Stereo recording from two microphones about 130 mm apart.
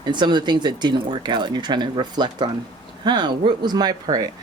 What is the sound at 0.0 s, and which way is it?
Speech, 35° right (ahead or behind).